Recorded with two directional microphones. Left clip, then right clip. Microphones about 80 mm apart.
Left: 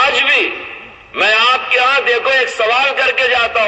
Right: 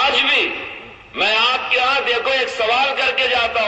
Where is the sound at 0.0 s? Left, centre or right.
Left.